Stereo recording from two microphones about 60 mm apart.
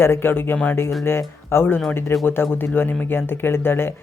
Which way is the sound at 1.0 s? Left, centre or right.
Left.